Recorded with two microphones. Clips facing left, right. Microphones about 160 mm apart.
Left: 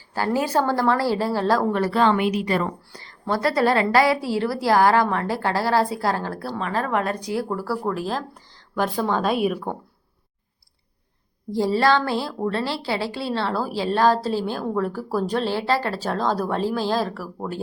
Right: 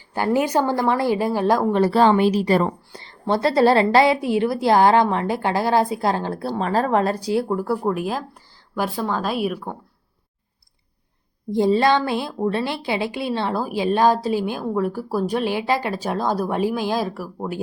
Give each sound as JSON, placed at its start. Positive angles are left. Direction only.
{"t": 0.1, "sound": "a woman's voice", "side_deg": -20}
{"t": 7.4, "sound": "a woman's voice", "side_deg": -20}
{"t": 11.5, "sound": "a woman's voice", "side_deg": -20}